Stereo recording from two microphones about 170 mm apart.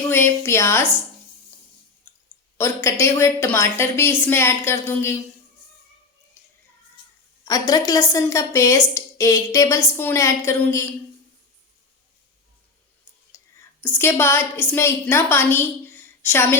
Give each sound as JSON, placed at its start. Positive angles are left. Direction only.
{"t": 0.1, "sound": "a woman's voice", "side_deg": 15}
{"t": 2.6, "sound": "a woman's voice", "side_deg": 15}
{"t": 7.4, "sound": "a woman's voice", "side_deg": 20}
{"t": 13.8, "sound": "a woman's voice", "side_deg": 15}